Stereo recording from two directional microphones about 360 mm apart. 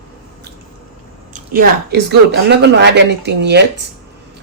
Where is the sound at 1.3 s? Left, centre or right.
Right.